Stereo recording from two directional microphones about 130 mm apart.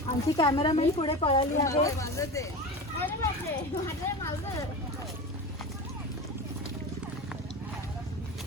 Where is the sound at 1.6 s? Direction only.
25° left (ahead or behind).